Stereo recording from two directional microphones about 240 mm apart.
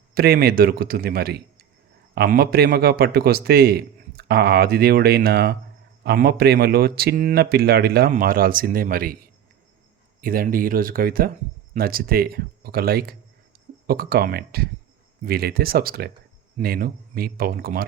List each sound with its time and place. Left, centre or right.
0.1 s a man's voice: right
10.2 s a man's voice: right